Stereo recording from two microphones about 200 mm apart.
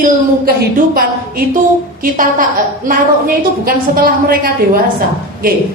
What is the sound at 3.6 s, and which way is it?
A man's voice, 45° right (ahead or behind).